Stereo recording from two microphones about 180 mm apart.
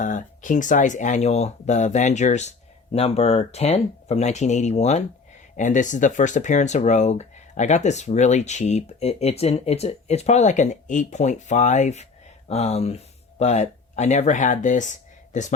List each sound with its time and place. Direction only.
0.0 s speech: 45° left (ahead or behind)